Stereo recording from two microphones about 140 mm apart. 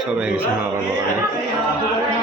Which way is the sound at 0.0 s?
10° right (ahead or behind).